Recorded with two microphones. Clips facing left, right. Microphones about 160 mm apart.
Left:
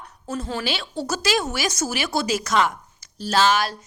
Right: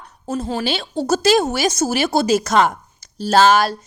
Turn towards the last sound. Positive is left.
turn(degrees=-45)  # may be behind; listen again after turning